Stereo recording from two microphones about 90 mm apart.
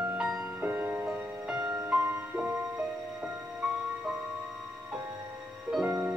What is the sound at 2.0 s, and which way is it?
Music, 25° right (ahead or behind).